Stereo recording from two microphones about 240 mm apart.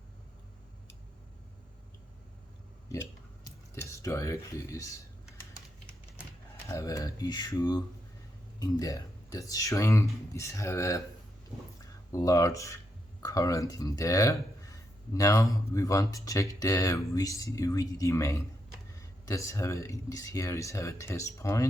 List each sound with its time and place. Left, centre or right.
2.9 s a sound: centre
6.7 s speech: centre
12.1 s speech: centre